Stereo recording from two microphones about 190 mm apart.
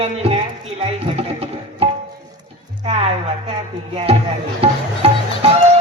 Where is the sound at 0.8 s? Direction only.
30° right (ahead or behind).